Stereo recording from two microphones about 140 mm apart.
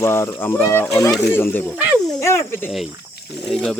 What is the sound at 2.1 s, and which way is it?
Speech, 20° left (ahead or behind).